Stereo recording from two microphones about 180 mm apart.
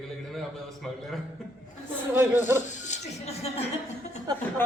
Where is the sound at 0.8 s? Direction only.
Centre (ahead or behind).